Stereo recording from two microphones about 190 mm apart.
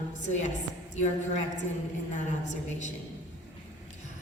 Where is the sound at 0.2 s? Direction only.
40° left (ahead or behind).